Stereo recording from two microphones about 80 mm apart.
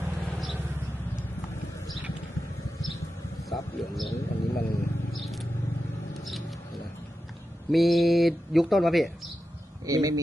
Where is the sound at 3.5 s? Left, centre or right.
Centre.